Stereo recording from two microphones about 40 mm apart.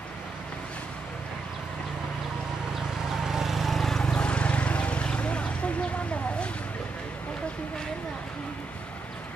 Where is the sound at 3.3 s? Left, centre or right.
Centre.